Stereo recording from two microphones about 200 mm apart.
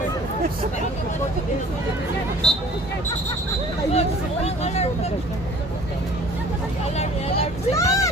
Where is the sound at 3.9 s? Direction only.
30° left (ahead or behind).